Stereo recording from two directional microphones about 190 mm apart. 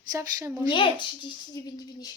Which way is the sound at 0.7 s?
25° left (ahead or behind).